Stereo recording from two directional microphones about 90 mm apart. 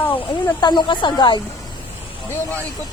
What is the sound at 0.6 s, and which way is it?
Speech, 55° left (ahead or behind).